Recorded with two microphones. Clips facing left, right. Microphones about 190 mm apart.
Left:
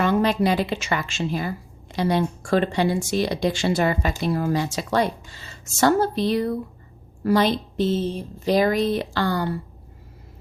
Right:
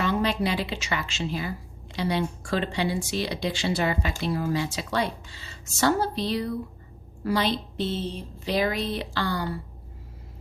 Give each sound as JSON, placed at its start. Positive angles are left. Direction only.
{"t": 0.0, "sound": "speech", "side_deg": 50}